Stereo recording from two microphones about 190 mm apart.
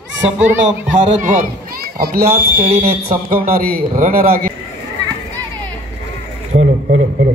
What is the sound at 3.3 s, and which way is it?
Speech, 50° right (ahead or behind).